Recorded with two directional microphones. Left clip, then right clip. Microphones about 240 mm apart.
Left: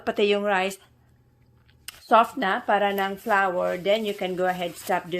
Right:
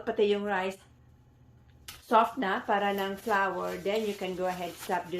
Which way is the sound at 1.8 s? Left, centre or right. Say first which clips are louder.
Left 5 dB; left.